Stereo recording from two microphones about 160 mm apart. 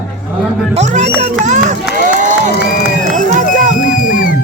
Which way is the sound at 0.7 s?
45° right (ahead or behind).